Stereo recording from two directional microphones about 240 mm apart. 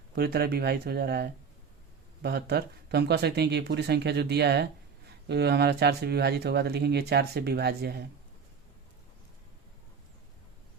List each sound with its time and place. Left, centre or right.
0.2 s speech: right